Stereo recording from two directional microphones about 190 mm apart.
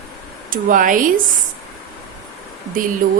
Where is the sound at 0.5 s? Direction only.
45° right (ahead or behind).